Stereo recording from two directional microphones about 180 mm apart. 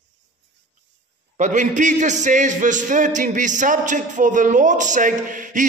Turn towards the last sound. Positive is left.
turn(degrees=-45)  # may be behind; listen again after turning